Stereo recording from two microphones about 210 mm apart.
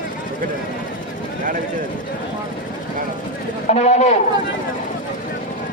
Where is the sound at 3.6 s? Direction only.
35° left (ahead or behind).